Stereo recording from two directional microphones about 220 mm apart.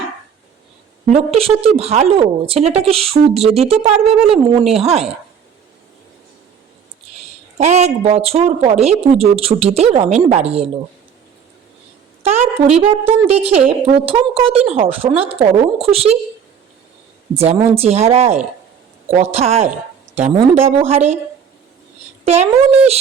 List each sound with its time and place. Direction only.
1.1 s speech: 25° right (ahead or behind)
7.6 s speech: 30° right (ahead or behind)
12.2 s a woman's voice: 30° right (ahead or behind)
17.3 s speech: 30° right (ahead or behind)
22.7 s speech: 30° right (ahead or behind)